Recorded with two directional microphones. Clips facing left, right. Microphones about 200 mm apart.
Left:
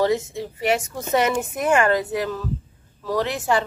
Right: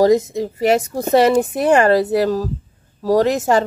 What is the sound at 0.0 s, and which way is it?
A woman's voice, 40° right (ahead or behind).